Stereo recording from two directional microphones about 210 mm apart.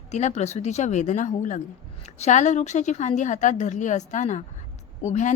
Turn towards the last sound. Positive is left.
turn(degrees=35)  # may be behind; listen again after turning